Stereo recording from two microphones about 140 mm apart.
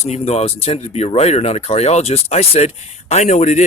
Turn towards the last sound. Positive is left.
turn(degrees=55)  # may be behind; listen again after turning